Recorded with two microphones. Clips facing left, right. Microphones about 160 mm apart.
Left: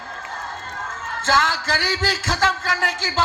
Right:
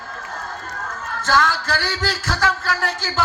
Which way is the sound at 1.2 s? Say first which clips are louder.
Right 1 dB; 25° left (ahead or behind).